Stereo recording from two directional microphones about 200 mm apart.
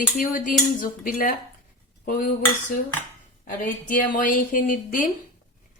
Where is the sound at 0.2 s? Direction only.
45° left (ahead or behind).